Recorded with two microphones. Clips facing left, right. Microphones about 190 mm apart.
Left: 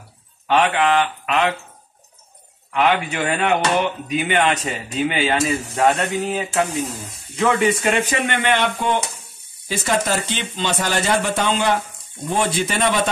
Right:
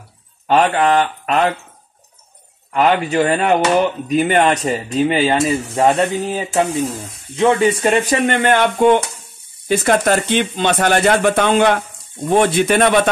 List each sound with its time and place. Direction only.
0.5 s speech: 35° right (ahead or behind)
2.7 s speech: 40° right (ahead or behind); by 13.1 s 60° right (ahead or behind)